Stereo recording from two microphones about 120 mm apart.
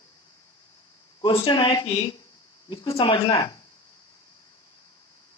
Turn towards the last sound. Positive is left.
turn(degrees=40)  # may be behind; listen again after turning